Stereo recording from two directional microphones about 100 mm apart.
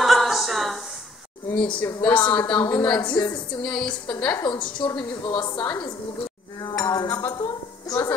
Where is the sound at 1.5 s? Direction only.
10° left (ahead or behind).